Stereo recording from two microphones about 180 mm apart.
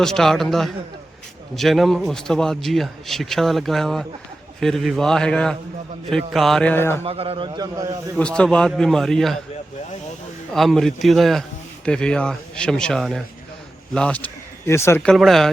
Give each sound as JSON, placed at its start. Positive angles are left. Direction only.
{"t": 0.0, "sound": "a man's voice", "side_deg": 5}
{"t": 7.0, "sound": "a man's voice", "side_deg": -35}
{"t": 8.1, "sound": "a man's voice", "side_deg": 5}
{"t": 10.5, "sound": "a man's voice", "side_deg": 0}
{"t": 15.1, "sound": "a man's voice", "side_deg": 0}